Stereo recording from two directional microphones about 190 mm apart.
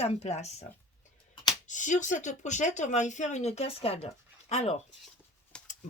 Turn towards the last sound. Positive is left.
turn(degrees=5)  # may be behind; listen again after turning